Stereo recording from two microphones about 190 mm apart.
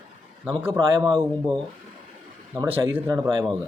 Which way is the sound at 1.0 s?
Centre (ahead or behind).